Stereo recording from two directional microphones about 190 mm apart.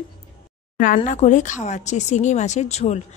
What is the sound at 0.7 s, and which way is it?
Speech, 45° left (ahead or behind).